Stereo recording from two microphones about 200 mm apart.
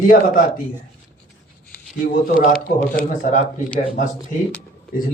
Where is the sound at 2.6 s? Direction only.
45° left (ahead or behind).